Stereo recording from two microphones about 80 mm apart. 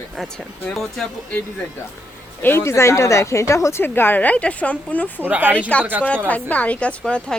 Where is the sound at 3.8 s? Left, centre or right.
Left.